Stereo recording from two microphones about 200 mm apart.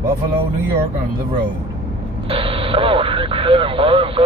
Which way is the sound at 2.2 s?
25° right (ahead or behind).